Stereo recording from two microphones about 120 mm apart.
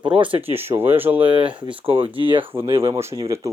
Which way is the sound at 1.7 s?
50° right (ahead or behind).